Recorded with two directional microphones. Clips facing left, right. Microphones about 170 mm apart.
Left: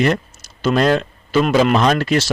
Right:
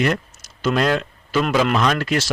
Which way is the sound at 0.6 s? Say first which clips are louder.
Left 4 dB; 30° left (ahead or behind).